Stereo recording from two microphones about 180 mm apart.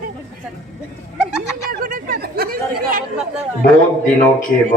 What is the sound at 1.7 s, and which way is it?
Chatter, 50° right (ahead or behind).